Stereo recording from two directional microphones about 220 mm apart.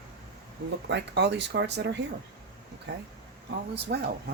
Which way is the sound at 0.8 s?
50° right (ahead or behind).